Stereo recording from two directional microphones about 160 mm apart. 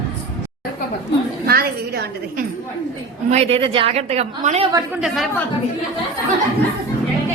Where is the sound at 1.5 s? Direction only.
75° right (ahead or behind).